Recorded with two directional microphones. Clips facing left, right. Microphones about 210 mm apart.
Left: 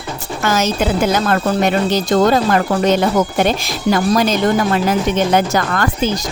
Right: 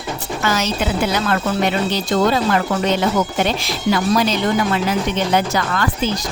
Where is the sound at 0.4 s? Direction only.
45° left (ahead or behind).